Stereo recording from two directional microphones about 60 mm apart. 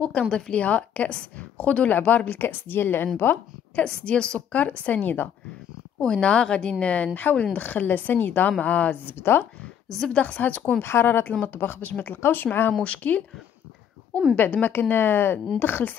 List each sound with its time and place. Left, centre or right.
0.0 s a woman's voice: centre; by 3.1 s left
3.7 s a woman's voice: centre
5.9 s a woman's voice: centre; by 8.5 s left
8.5 s a woman's voice: left
9.9 s speech: centre
10.2 s a woman's voice: left
10.8 s a woman's voice: left
12.8 s a woman's voice: left
14.3 s a woman's voice: left